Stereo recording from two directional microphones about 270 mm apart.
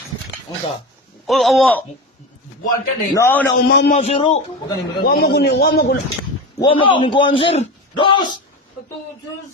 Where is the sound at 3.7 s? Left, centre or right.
Left.